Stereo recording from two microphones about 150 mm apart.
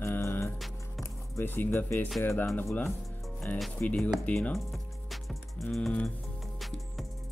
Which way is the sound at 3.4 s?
5° left (ahead or behind).